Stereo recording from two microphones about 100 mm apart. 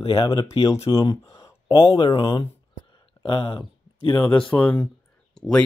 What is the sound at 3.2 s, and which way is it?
Speech, 60° left (ahead or behind).